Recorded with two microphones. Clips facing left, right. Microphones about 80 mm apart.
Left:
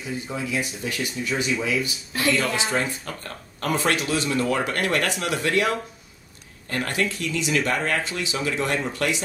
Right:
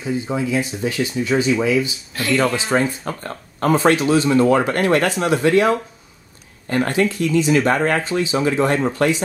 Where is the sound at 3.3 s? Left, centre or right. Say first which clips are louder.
Right 8 dB; right.